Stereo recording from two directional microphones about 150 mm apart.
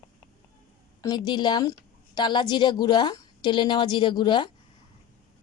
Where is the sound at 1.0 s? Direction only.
25° left (ahead or behind).